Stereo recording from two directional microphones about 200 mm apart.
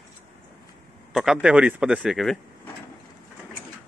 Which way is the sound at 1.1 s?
5° right (ahead or behind).